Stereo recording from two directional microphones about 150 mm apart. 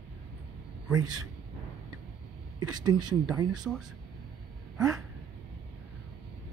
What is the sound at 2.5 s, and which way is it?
Speech, 25° right (ahead or behind).